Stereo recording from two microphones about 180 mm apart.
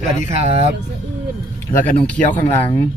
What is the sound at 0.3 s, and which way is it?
Speech, 40° right (ahead or behind).